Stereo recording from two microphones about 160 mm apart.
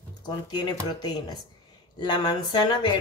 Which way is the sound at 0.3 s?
30° left (ahead or behind).